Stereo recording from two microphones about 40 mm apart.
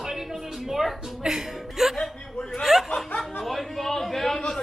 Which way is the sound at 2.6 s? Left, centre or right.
Centre.